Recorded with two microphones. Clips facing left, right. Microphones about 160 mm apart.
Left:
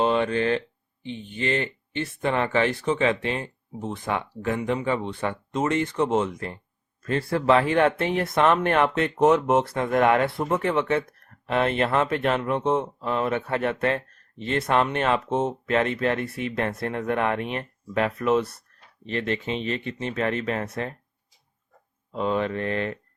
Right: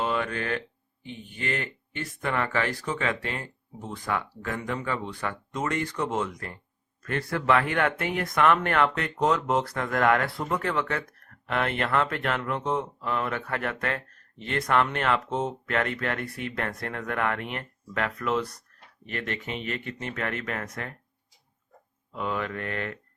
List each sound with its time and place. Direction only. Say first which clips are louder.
0.0 s speech: left 7 dB; 25° left (ahead or behind)
22.1 s speech: left 6 dB; 25° left (ahead or behind)